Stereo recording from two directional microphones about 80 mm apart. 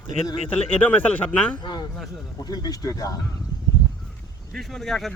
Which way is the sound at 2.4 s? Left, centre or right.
Left.